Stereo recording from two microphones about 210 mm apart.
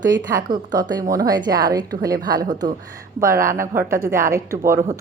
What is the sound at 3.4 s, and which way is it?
Speech, 40° right (ahead or behind).